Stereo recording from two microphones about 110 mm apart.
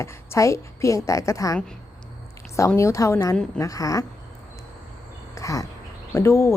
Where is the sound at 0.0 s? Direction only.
25° left (ahead or behind).